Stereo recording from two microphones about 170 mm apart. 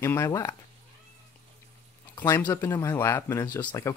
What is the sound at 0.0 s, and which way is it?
Speech, 15° left (ahead or behind).